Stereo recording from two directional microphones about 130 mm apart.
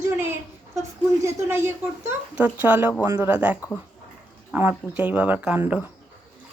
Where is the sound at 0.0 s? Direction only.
20° right (ahead or behind).